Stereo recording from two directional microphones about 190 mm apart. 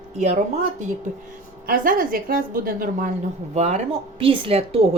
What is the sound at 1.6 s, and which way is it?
A woman's voice, 45° right (ahead or behind).